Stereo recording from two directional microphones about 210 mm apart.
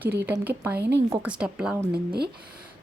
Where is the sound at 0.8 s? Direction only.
55° right (ahead or behind).